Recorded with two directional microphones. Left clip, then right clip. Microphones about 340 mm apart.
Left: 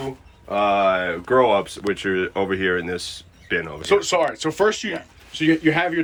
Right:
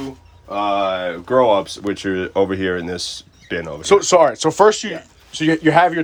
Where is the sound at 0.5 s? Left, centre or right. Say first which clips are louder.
Left 1 dB; centre.